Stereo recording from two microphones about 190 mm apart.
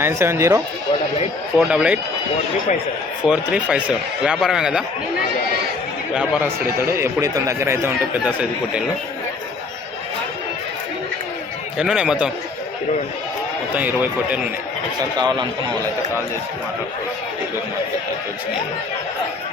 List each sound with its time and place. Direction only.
0.0 s a man's voice: 15° right (ahead or behind)
1.5 s speech: 5° right (ahead or behind)
3.2 s speech: 5° right (ahead or behind)
6.1 s a man's voice: 10° right (ahead or behind)
11.8 s speech: 5° right (ahead or behind)
13.7 s a man's voice: 10° right (ahead or behind)
15.2 s a man's voice: 25° right (ahead or behind)